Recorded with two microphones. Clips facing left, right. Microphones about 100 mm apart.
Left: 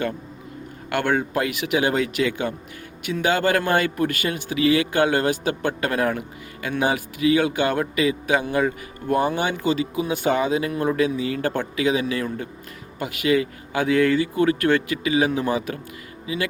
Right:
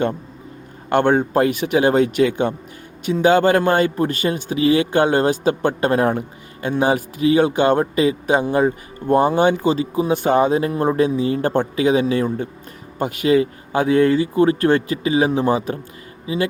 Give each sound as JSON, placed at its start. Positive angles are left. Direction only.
{"t": 0.9, "sound": "speech", "side_deg": -30}